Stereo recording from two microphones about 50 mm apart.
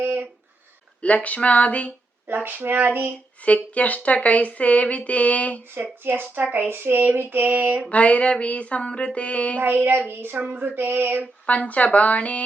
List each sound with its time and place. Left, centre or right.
0.0 s a sound: right
1.0 s speech: left
2.2 s female singing: right
3.4 s speech: left
6.1 s a sound: right
6.7 s female singing: right
7.9 s speech: left
9.6 s female singing: right
10.4 s a sound: right
11.4 s speech: left